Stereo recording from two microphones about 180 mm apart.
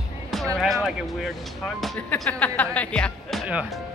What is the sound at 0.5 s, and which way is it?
Speech, centre (ahead or behind).